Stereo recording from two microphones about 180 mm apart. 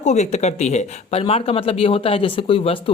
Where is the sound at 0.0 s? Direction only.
40° left (ahead or behind).